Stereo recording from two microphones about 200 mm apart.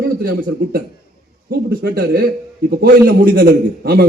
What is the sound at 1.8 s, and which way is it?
A man's voice, 50° right (ahead or behind).